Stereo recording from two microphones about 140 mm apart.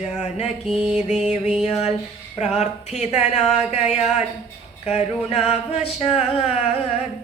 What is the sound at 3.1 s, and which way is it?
Speech, 5° right (ahead or behind).